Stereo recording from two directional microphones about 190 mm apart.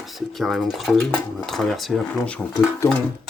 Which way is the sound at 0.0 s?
Centre (ahead or behind).